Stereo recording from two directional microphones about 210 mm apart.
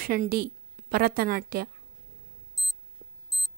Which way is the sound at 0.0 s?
45° right (ahead or behind).